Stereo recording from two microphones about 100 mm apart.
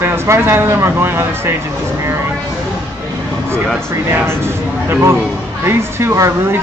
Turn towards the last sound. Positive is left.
turn(degrees=-30)  # may be behind; listen again after turning